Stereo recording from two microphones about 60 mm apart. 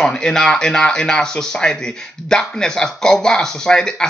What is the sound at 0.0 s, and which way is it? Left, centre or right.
Speech, centre.